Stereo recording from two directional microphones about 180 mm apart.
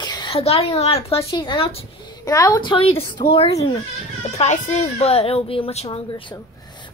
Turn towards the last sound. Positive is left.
turn(degrees=35)  # may be behind; listen again after turning